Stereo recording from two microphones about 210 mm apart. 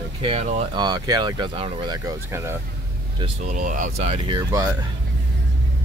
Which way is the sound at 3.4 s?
40° right (ahead or behind).